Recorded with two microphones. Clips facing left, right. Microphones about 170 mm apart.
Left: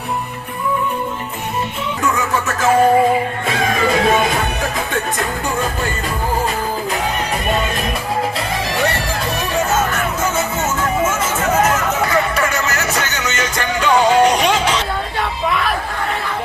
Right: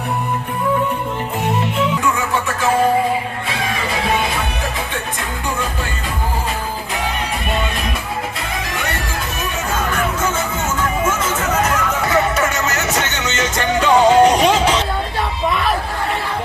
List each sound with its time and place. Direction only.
12.6 s music: 20° right (ahead or behind)